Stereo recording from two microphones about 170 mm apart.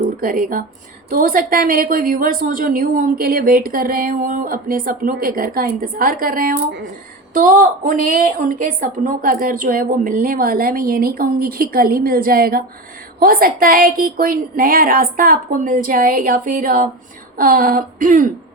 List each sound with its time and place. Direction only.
0.2 s a woman's voice: 55° right (ahead or behind)